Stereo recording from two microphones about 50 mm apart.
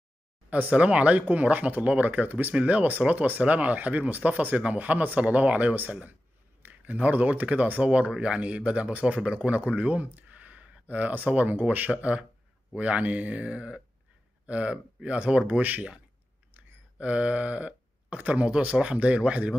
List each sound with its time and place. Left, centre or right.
0.5 s speech: right
17.0 s speech: right